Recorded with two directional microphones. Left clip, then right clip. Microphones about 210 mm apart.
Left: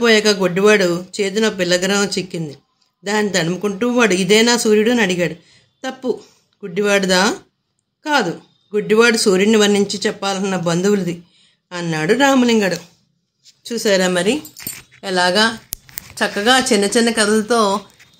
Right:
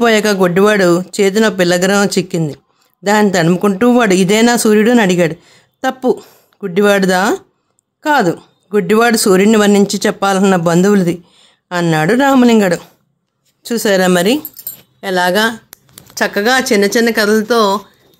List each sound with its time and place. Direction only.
0.0 s speech: 55° right (ahead or behind)
15.0 s a woman's voice: 25° right (ahead or behind)